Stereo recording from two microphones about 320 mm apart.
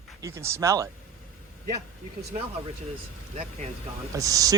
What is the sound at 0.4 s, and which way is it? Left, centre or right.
Speech, centre.